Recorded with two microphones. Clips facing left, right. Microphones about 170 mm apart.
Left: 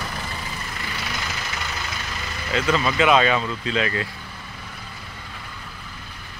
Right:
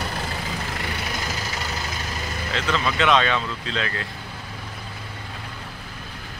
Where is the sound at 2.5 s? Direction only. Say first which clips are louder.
Left 4 dB; 5° left (ahead or behind).